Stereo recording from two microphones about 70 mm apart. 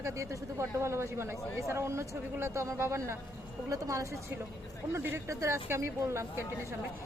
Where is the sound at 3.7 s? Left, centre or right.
Right.